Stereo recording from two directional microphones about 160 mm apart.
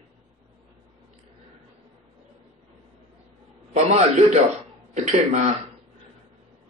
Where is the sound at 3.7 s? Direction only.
45° right (ahead or behind).